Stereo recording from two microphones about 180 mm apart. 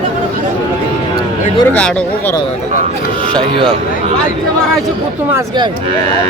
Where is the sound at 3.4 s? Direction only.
30° right (ahead or behind).